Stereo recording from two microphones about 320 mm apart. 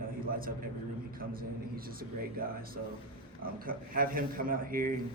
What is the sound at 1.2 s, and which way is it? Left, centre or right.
Speech, right.